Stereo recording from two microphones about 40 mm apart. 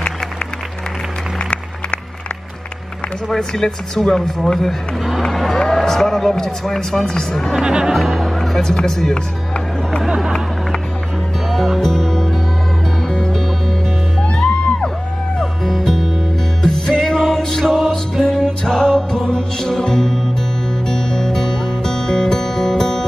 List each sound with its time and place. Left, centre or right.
3.3 s speech: centre
7.5 s speech: centre
7.9 s music: centre
10.0 s speech: centre
11.4 s music: centre
14.3 s music: left
15.3 s music: centre